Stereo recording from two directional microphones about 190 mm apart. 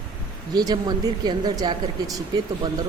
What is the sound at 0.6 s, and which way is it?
Speech, 20° right (ahead or behind).